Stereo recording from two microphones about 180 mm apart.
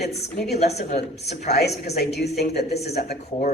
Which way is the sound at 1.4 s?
65° left (ahead or behind).